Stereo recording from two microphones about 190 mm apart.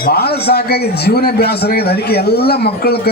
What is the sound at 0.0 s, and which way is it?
A man's voice, 55° left (ahead or behind).